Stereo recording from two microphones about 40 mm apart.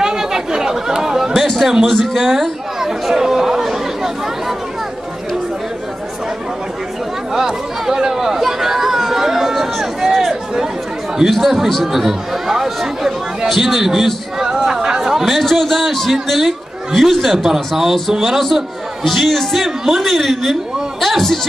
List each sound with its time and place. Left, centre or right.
0.0 s chatter: centre
1.9 s speech: centre
7.3 s chatter: centre
11.2 s speech: centre
14.4 s speech: right; by 20.5 s centre
21.0 s a sound: centre